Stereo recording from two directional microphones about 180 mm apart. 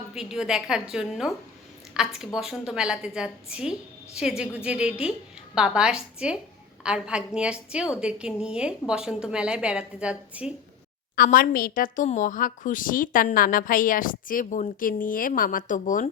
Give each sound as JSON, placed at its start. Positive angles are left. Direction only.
{"t": 0.1, "sound": "a woman's voice", "side_deg": -5}
{"t": 11.2, "sound": "a woman's voice", "side_deg": 50}